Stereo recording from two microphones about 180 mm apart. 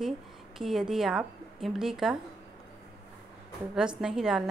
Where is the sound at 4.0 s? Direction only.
5° right (ahead or behind).